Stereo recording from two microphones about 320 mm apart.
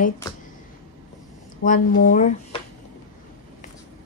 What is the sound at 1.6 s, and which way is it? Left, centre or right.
Speech, left.